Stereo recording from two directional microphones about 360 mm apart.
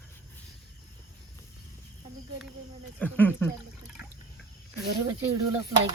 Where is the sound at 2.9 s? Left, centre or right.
Centre.